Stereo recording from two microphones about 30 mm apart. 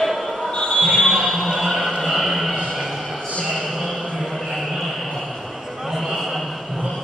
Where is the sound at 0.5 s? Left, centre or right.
Left.